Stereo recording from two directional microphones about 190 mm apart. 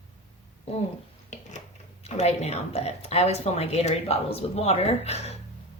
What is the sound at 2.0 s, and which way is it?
Speech, 35° left (ahead or behind).